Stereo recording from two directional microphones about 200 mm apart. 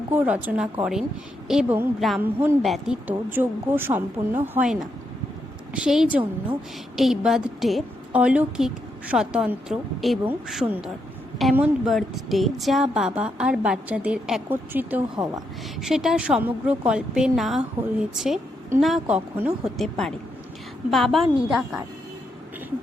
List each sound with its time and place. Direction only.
0.1 s a woman's voice: 10° right (ahead or behind)
15.8 s speech: centre (ahead or behind)
18.8 s speech: centre (ahead or behind)